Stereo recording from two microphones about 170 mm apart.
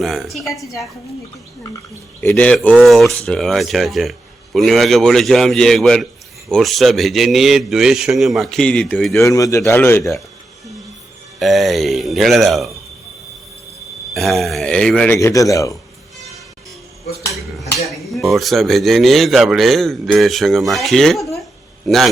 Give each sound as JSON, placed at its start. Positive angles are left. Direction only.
{"t": 0.0, "sound": "speech", "side_deg": 0}
{"t": 2.2, "sound": "a man's voice", "side_deg": 10}
{"t": 9.1, "sound": "a man's voice", "side_deg": 20}
{"t": 11.3, "sound": "speech", "side_deg": 0}
{"t": 14.1, "sound": "speech", "side_deg": 0}
{"t": 15.2, "sound": "speech", "side_deg": 20}
{"t": 17.8, "sound": "speech", "side_deg": 0}